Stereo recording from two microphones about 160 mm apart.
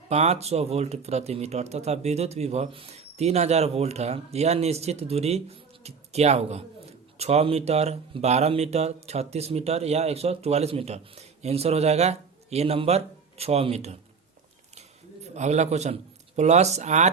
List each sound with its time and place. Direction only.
0.1 s a man's voice: 40° right (ahead or behind)